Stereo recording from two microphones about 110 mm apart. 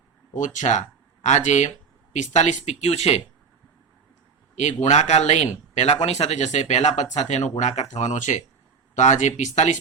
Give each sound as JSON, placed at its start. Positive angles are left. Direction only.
{"t": 0.6, "sound": "speech", "side_deg": 90}
{"t": 4.5, "sound": "speech", "side_deg": 90}